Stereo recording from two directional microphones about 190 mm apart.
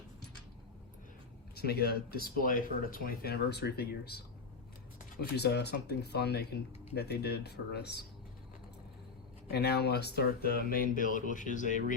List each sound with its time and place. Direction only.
1.5 s speech: 55° left (ahead or behind)
5.3 s speech: 60° left (ahead or behind)
9.5 s speech: 60° left (ahead or behind); by 11.9 s 40° left (ahead or behind)